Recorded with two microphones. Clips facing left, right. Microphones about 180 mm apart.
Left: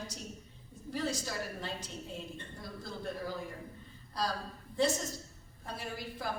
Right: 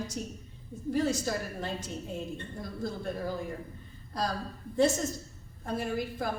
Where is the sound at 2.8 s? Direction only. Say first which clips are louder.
Right 5 dB; 50° right (ahead or behind).